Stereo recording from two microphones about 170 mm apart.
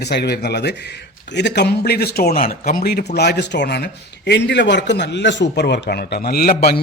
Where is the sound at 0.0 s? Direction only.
75° left (ahead or behind).